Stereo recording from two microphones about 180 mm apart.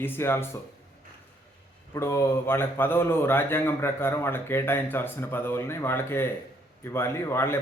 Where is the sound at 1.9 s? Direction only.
15° left (ahead or behind).